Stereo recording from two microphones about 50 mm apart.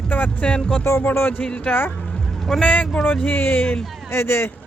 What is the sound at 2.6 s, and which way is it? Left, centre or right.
Speech, left.